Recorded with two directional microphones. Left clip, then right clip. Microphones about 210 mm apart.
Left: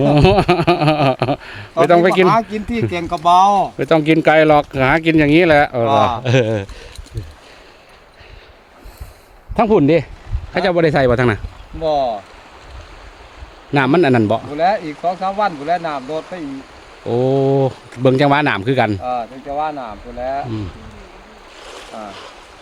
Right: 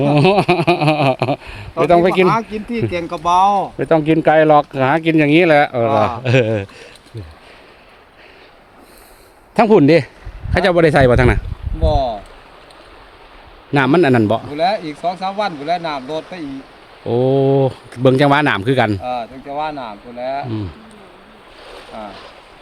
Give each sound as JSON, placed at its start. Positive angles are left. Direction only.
{"t": 0.0, "sound": "speech", "side_deg": 5}
{"t": 2.2, "sound": "speech", "side_deg": 45}
{"t": 3.8, "sound": "speech", "side_deg": 10}
{"t": 9.6, "sound": "speech", "side_deg": -15}
{"t": 13.7, "sound": "speech", "side_deg": -5}
{"t": 14.5, "sound": "speech", "side_deg": -20}
{"t": 17.1, "sound": "speech", "side_deg": -5}
{"t": 18.9, "sound": "speech", "side_deg": -25}
{"t": 21.6, "sound": "boat", "side_deg": 40}